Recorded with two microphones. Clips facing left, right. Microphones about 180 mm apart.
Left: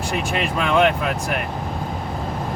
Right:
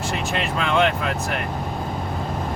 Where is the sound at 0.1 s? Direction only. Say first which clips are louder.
Left 3 dB; 15° left (ahead or behind).